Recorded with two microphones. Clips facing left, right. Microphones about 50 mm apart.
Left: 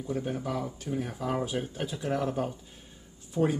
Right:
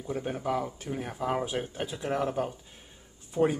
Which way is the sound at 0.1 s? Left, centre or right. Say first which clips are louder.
Right 2 dB; right.